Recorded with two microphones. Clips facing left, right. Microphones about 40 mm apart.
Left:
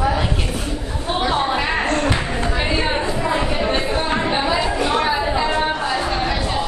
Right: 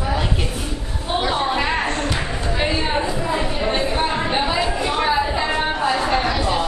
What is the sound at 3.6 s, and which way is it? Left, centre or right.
Chatter, centre.